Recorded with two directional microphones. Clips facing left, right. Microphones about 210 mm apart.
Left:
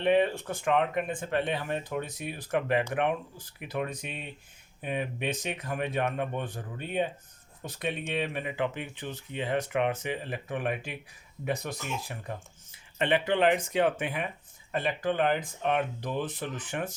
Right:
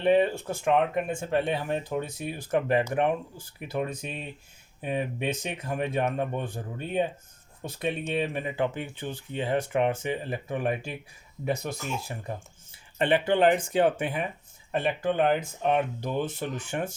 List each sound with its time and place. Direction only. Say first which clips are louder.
0.0 s speech: right 2 dB; 35° right (ahead or behind)
7.6 s speech: right 3 dB; 30° right (ahead or behind)
15.3 s speech: right 3 dB; 35° right (ahead or behind)
16.2 s speech: right 3 dB; 25° right (ahead or behind)